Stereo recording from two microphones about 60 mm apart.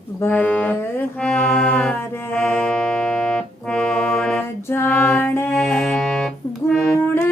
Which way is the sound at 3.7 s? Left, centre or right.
Centre.